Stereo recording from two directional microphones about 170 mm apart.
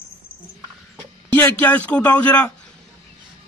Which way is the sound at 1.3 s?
10° left (ahead or behind).